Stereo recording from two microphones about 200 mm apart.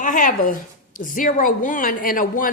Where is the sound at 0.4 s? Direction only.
40° left (ahead or behind).